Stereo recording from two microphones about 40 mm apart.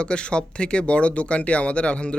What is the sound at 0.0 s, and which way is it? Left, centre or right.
Speech, left.